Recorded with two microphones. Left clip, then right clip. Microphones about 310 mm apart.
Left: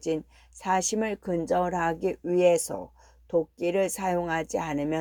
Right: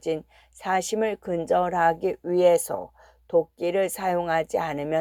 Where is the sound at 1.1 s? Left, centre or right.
Right.